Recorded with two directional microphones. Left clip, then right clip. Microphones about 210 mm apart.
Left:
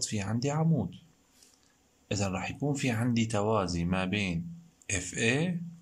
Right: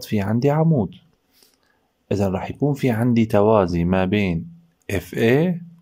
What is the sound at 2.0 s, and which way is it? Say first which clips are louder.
Speech: right 11 dB; 35° right (ahead or behind).